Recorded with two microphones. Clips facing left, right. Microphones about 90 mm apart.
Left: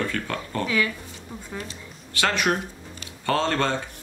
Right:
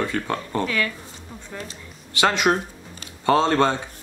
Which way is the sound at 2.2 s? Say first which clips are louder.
Right 4 dB; 20° right (ahead or behind).